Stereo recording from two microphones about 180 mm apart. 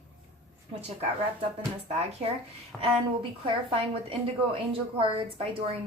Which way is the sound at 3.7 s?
30° right (ahead or behind).